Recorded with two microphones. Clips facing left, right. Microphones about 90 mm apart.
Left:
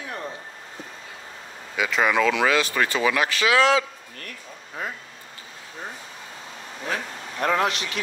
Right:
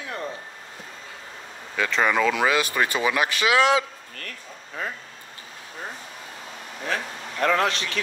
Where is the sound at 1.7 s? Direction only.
10° left (ahead or behind); by 3.9 s 20° right (ahead or behind).